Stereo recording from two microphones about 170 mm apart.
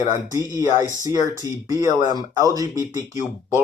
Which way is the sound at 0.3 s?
20° right (ahead or behind).